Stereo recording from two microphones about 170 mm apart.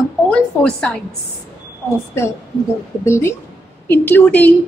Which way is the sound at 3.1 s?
15° left (ahead or behind).